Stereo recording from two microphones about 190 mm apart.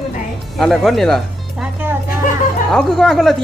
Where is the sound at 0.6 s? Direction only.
Centre (ahead or behind).